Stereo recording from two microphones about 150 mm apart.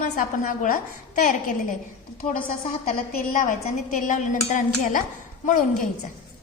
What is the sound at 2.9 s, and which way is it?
A woman's voice, 60° left (ahead or behind).